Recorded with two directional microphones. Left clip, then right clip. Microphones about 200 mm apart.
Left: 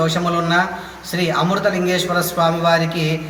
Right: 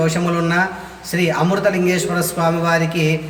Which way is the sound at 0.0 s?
15° right (ahead or behind).